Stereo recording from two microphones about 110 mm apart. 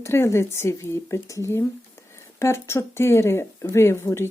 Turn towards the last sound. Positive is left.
turn(degrees=25)  # may be behind; listen again after turning